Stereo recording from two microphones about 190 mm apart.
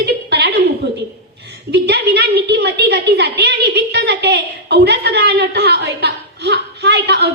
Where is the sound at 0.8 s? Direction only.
60° right (ahead or behind).